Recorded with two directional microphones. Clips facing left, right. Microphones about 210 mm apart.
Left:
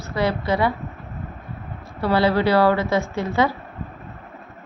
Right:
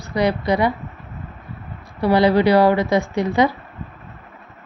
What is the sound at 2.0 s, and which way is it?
A woman's voice, 15° right (ahead or behind).